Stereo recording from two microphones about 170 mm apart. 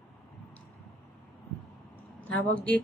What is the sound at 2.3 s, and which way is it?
Speech, 10° left (ahead or behind).